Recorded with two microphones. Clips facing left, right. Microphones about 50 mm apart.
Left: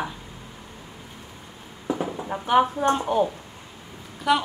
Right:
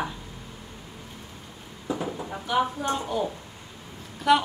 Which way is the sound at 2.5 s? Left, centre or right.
Left.